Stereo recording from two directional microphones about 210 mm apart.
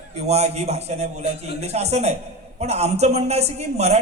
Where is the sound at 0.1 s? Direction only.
30° right (ahead or behind).